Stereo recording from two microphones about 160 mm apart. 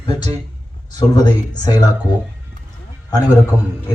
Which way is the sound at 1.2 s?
25° left (ahead or behind).